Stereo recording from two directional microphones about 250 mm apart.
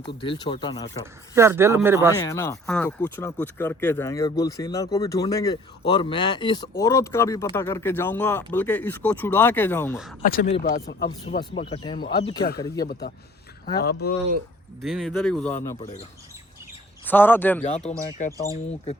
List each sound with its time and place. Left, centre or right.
0.2 s speech: centre
1.4 s speech: centre
2.1 s speech: centre
10.2 s speech: left
11.3 s speech: left
12.9 s speech: left
14.8 s speech: centre
15.8 s speech: left
17.1 s speech: centre
17.6 s speech: left